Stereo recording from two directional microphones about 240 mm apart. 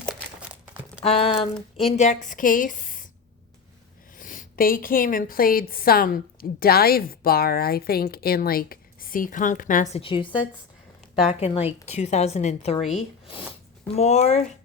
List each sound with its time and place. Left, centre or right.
0.0 s crumpling: centre
1.0 s a woman's voice: left
4.2 s a woman's voice: left